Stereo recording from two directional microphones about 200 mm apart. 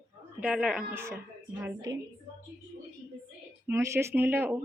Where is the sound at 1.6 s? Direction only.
20° right (ahead or behind).